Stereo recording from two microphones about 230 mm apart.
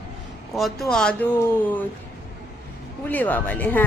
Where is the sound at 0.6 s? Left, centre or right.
Centre.